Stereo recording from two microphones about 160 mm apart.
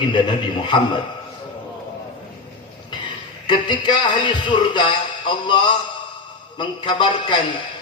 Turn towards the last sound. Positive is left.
turn(degrees=30)  # may be behind; listen again after turning